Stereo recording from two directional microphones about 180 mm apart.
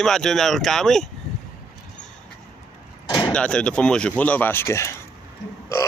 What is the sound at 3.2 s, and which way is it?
Speech, 5° left (ahead or behind).